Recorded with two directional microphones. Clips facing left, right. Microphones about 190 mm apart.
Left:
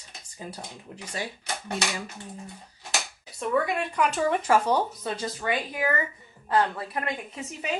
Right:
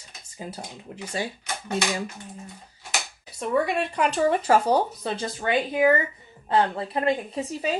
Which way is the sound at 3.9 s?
30° right (ahead or behind).